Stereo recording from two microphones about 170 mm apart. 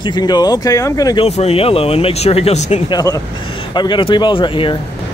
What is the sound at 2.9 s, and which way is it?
Speech, 20° left (ahead or behind).